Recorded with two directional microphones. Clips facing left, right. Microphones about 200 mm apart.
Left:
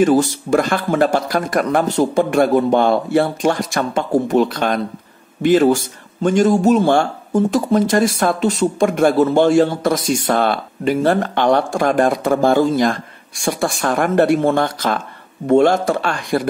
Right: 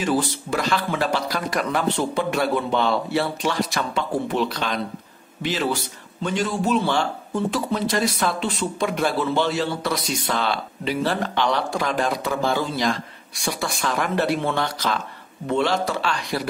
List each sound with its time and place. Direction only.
0.0 s a man's voice: 45° left (ahead or behind)